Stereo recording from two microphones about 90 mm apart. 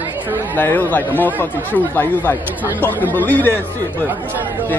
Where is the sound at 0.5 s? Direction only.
20° left (ahead or behind).